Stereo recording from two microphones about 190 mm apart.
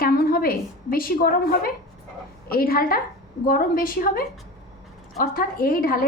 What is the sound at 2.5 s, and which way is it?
A woman's voice, 50° left (ahead or behind).